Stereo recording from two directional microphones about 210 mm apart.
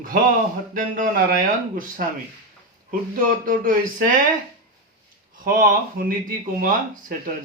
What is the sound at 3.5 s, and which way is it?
Speech, 40° right (ahead or behind).